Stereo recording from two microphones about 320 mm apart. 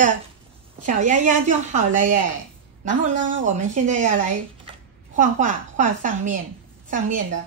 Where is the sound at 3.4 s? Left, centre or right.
Right.